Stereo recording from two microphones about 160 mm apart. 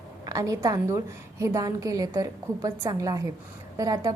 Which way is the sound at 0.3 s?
20° right (ahead or behind).